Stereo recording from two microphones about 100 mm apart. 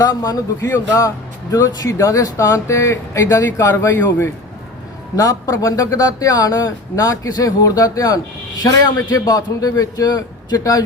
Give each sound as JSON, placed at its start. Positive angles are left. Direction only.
{"t": 0.0, "sound": "speech", "side_deg": 40}